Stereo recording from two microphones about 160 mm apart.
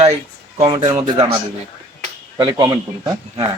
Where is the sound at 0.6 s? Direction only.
45° right (ahead or behind).